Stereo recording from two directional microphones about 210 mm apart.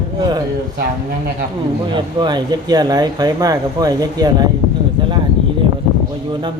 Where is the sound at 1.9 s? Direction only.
20° right (ahead or behind).